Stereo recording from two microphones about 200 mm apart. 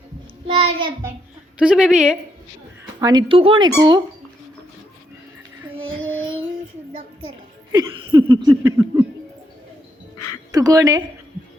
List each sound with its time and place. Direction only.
0.4 s child singing: 30° right (ahead or behind)
1.5 s a woman's voice: 5° right (ahead or behind)
3.0 s a sound: 20° right (ahead or behind)
5.9 s child singing: 90° right
7.7 s a sound: 20° right (ahead or behind)
10.5 s a woman's voice: 15° right (ahead or behind)